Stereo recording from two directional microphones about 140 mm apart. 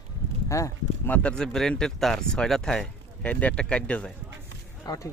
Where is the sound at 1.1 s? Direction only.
5° left (ahead or behind).